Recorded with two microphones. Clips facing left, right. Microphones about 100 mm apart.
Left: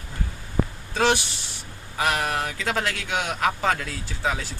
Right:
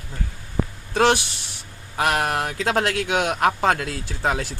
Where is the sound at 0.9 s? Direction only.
60° right (ahead or behind).